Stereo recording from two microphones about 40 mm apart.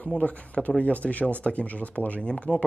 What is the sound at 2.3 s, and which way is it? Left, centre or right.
Speech, left.